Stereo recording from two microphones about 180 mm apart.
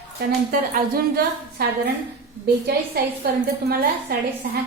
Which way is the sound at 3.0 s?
60° right (ahead or behind).